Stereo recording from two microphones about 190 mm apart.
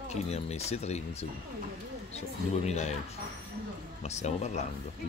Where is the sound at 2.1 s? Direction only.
35° left (ahead or behind).